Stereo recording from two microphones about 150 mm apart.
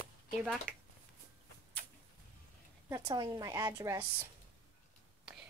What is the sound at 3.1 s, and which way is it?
Speech, 25° right (ahead or behind).